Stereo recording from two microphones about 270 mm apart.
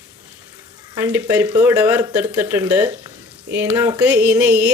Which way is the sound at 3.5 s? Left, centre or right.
Centre.